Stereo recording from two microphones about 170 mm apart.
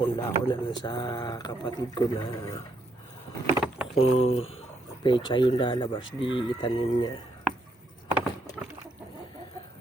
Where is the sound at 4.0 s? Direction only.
35° left (ahead or behind).